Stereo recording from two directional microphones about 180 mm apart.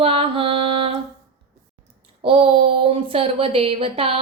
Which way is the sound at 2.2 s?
30° right (ahead or behind).